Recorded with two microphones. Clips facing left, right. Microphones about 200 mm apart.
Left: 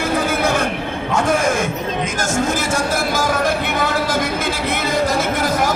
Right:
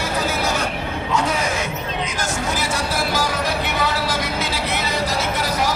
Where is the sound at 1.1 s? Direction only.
50° left (ahead or behind).